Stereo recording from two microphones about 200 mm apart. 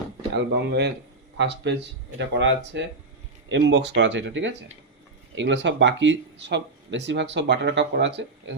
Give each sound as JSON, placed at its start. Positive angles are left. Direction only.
{"t": 0.3, "sound": "speech", "side_deg": -60}